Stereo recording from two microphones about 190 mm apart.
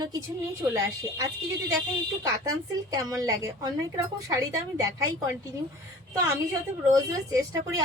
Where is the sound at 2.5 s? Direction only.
20° right (ahead or behind).